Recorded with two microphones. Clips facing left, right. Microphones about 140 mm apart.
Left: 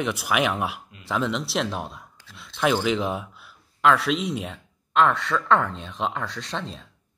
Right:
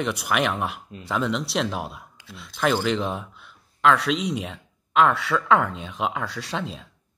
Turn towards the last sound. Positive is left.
turn(degrees=-5)  # may be behind; listen again after turning